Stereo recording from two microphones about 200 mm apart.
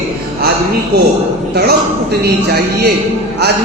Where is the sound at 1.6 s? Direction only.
55° right (ahead or behind).